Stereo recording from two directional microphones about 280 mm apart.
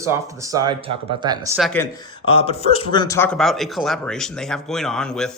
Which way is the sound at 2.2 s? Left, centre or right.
Centre.